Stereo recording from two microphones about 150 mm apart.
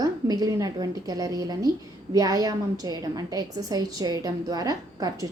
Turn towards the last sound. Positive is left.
turn(degrees=-25)  # may be behind; listen again after turning